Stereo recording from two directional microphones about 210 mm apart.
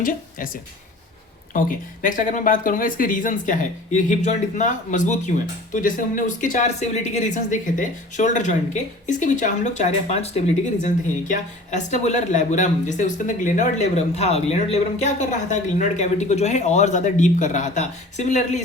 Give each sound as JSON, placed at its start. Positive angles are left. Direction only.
{"t": 0.0, "sound": "a woman's voice", "side_deg": 40}